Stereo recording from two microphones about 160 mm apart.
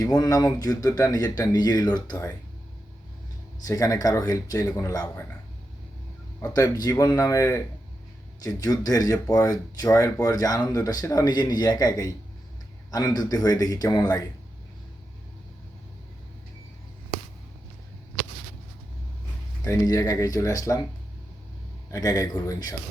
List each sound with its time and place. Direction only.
0.0 s speech: 25° left (ahead or behind)
3.7 s speech: 20° left (ahead or behind)
6.5 s speech: 25° left (ahead or behind)
19.6 s speech: 20° left (ahead or behind)
21.8 s speech: 20° left (ahead or behind)